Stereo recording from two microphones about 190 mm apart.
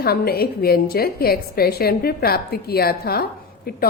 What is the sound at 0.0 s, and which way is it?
A woman's voice, 55° left (ahead or behind).